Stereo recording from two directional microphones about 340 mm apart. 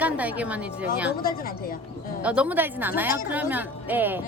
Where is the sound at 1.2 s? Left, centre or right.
Left.